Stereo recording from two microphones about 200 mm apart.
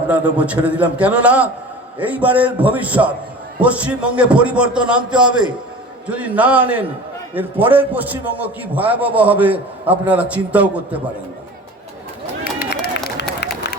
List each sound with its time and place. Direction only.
0.1 s a man's voice: 5° right (ahead or behind)
6.1 s a man's voice: 5° right (ahead or behind)
12.5 s run: 50° left (ahead or behind)